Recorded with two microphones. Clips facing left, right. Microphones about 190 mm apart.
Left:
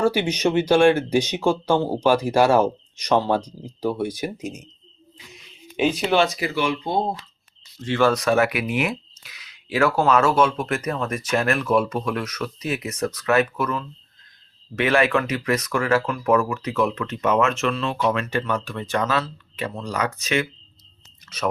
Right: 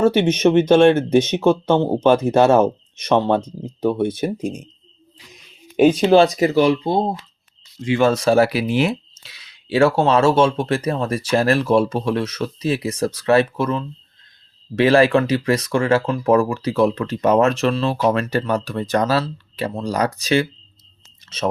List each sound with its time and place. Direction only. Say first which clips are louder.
0.0 s speech: right 5 dB; 25° right (ahead or behind)
6.0 s speech: right 7 dB; 35° right (ahead or behind)